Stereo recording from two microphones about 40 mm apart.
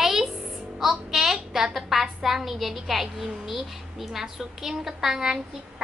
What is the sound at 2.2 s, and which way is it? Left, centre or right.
A woman's voice, centre.